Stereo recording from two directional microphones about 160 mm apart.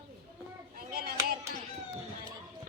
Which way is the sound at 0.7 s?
70° right (ahead or behind).